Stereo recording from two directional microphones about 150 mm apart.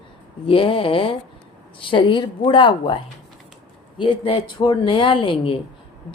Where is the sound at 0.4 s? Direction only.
35° left (ahead or behind).